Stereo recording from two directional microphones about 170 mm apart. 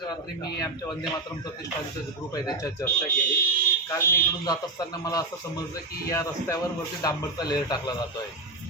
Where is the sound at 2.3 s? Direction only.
20° left (ahead or behind).